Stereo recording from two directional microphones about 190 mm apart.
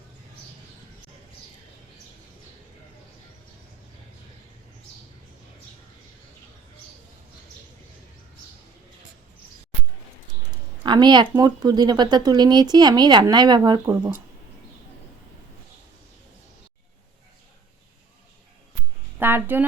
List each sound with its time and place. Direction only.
10.8 s speech: 20° right (ahead or behind)
19.2 s speech: 10° right (ahead or behind)